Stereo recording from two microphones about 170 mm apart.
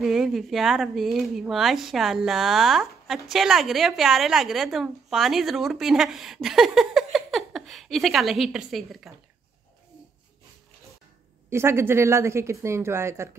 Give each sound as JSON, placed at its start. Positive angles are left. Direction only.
{"t": 0.0, "sound": "speech", "side_deg": 0}
{"t": 11.5, "sound": "a woman's voice", "side_deg": -15}